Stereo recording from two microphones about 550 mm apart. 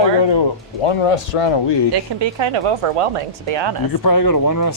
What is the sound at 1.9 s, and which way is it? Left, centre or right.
Speech, right.